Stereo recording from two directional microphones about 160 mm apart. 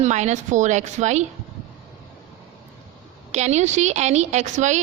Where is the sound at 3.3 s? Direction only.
45° right (ahead or behind).